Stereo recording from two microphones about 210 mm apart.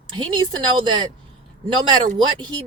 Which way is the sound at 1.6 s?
25° right (ahead or behind).